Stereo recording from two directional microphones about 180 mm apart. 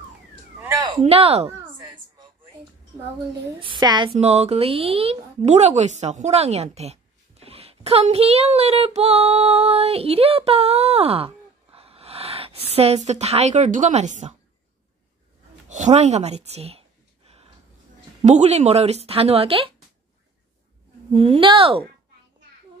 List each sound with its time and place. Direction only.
0.6 s a sound: 15° right (ahead or behind)
0.9 s a sound: 35° right (ahead or behind)
3.5 s a woman's voice: 25° right (ahead or behind)
15.7 s speech: 40° right (ahead or behind)
18.2 s speech: 40° right (ahead or behind)
21.1 s speech: 30° right (ahead or behind)